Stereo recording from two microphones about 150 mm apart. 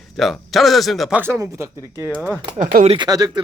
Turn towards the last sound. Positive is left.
turn(degrees=-25)  # may be behind; listen again after turning